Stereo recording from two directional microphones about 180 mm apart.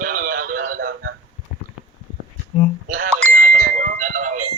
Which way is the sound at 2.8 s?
50° right (ahead or behind).